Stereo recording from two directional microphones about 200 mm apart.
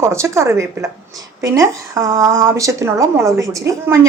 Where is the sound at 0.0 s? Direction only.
15° right (ahead or behind).